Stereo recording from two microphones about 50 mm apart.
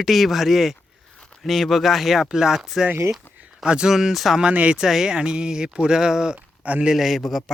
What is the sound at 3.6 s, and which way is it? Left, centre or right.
Speech, centre.